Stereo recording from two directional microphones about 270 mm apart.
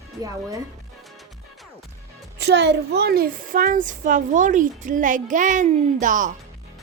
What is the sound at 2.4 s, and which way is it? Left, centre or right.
A woman's voice, right.